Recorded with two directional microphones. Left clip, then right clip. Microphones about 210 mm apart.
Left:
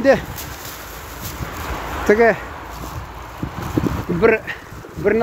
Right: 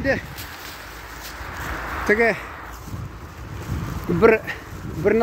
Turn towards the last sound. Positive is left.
turn(degrees=-20)  # may be behind; listen again after turning